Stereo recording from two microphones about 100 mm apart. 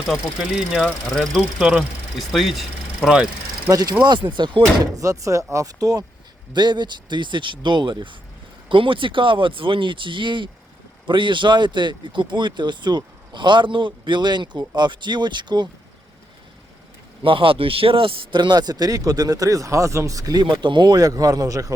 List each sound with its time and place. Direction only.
0.1 s speech: 5° right (ahead or behind)
1.4 s speech: 10° right (ahead or behind)
3.7 s a man's voice: 40° right (ahead or behind)
4.0 s speech: 50° right (ahead or behind)
4.9 s a man's voice: 35° right (ahead or behind)
6.5 s speech: 45° right (ahead or behind)
17.2 s a man's voice: 60° right (ahead or behind); by 21.7 s 35° right (ahead or behind)